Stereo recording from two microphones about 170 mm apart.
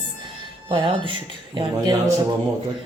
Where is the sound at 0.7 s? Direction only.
30° right (ahead or behind).